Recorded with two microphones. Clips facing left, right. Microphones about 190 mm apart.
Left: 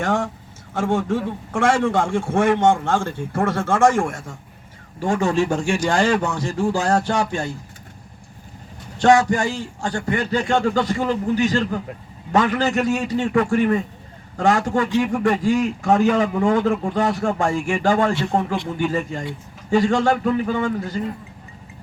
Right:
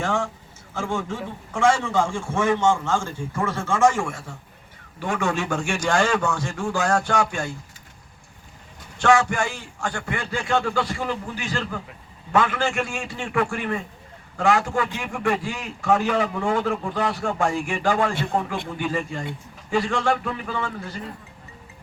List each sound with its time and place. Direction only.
0.7 s a man's voice: 60° left (ahead or behind)
4.9 s a man's voice: 30° left (ahead or behind)
5.5 s a man's voice: 40° left (ahead or behind)
9.0 s a man's voice: 35° left (ahead or behind)